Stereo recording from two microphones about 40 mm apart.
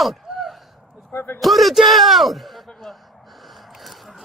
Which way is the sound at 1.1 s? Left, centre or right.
Left.